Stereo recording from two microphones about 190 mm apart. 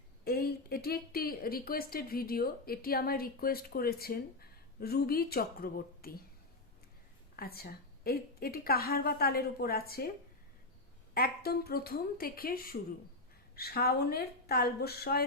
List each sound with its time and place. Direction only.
0.3 s speech: 55° left (ahead or behind)
7.3 s speech: 55° left (ahead or behind)
11.1 s a woman's voice: 55° left (ahead or behind)